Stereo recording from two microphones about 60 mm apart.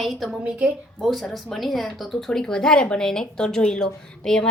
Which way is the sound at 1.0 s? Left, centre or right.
Centre.